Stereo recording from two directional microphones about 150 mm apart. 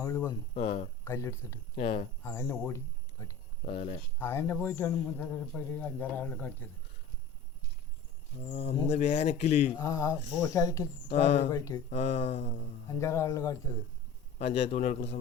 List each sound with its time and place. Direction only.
0.0 s speech: 20° left (ahead or behind)
0.5 s speech: 45° left (ahead or behind)
1.0 s speech: 20° left (ahead or behind)
1.7 s speech: 45° left (ahead or behind)
2.2 s speech: 20° left (ahead or behind)
3.8 s speech: 45° left (ahead or behind)
4.2 s a man's voice: 15° left (ahead or behind)
8.4 s speech: 45° left (ahead or behind)
9.7 s speech: 20° left (ahead or behind)
11.9 s speech: 45° left (ahead or behind)
12.9 s speech: 20° left (ahead or behind)
14.3 s speech: 50° left (ahead or behind)